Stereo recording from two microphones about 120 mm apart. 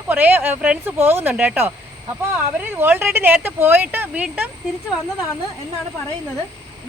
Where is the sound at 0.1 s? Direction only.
15° right (ahead or behind).